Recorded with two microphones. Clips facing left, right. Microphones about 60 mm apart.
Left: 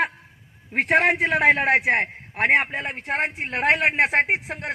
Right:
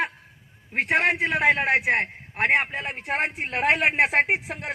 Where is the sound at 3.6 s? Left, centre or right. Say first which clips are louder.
Left 1 dB; left.